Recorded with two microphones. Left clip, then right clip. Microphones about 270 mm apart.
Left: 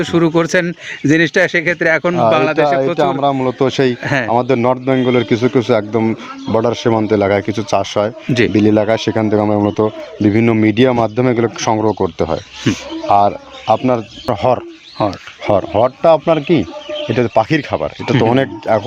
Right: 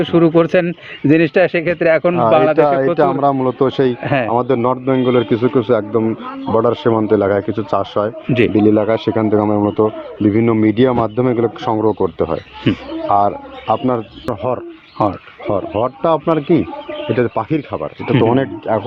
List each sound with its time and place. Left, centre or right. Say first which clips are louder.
0.0 s speech: right 2 dB; left
4.0 s speech: even; centre
4.3 s speech: left 4 dB; left
8.3 s speech: right 2 dB; left
8.5 s speech: left 1 dB; left
15.4 s speech: left 5 dB; left